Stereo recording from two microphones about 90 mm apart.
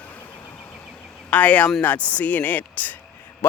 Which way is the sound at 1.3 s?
15° left (ahead or behind).